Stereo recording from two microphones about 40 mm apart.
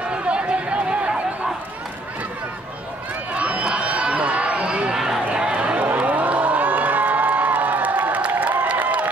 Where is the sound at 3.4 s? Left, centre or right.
Right.